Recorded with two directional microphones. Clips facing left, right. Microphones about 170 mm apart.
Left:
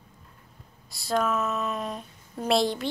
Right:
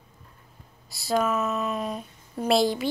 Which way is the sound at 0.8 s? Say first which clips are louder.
Right 2 dB; centre (ahead or behind).